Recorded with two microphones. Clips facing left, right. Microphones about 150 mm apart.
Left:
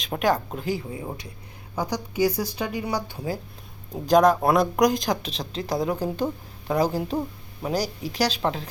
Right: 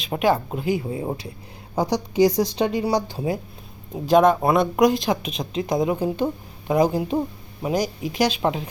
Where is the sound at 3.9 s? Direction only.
5° right (ahead or behind).